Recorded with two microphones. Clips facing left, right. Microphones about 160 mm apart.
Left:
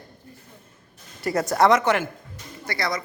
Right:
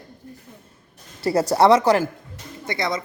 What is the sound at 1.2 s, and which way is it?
Speech, 30° right (ahead or behind).